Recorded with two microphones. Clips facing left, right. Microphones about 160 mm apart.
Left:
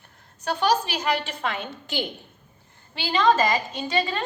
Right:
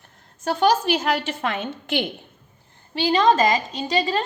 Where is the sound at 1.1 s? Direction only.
45° right (ahead or behind).